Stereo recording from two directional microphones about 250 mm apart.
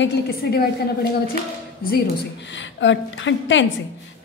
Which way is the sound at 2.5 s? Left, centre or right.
Left.